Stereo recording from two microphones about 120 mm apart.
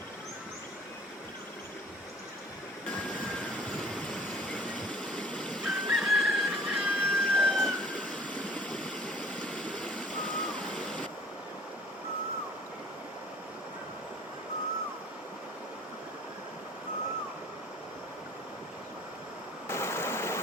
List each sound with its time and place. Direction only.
3.7 s vehicle: 5° left (ahead or behind)
19.6 s stream: 20° left (ahead or behind)